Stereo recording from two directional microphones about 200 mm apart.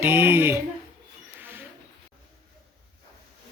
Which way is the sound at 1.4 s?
10° right (ahead or behind).